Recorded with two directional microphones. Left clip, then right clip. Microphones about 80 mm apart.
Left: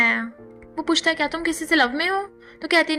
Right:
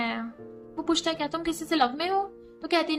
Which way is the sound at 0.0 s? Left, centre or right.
Left.